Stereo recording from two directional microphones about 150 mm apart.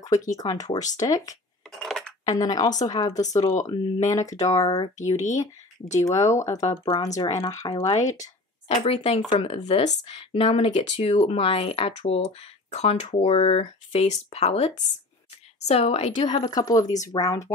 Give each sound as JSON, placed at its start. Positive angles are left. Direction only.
{"t": 0.4, "sound": "speech", "side_deg": 25}
{"t": 1.8, "sound": "dishes", "side_deg": 5}
{"t": 2.2, "sound": "speech", "side_deg": 25}
{"t": 4.9, "sound": "a woman's voice", "side_deg": 50}
{"t": 5.9, "sound": "speech", "side_deg": 20}
{"t": 6.7, "sound": "speech", "side_deg": 30}
{"t": 8.1, "sound": "a woman's voice", "side_deg": 45}
{"t": 16.3, "sound": "speech", "side_deg": 25}